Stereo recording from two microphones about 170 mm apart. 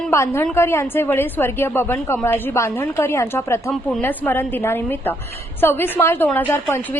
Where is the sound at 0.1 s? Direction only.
15° left (ahead or behind).